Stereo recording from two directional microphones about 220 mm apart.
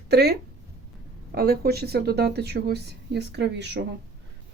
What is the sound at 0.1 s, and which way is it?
Speech, 45° right (ahead or behind).